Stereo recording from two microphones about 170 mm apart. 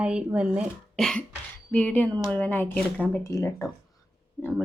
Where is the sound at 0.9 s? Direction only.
5° left (ahead or behind).